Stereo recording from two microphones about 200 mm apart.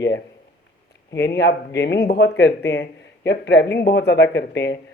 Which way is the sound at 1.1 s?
60° left (ahead or behind).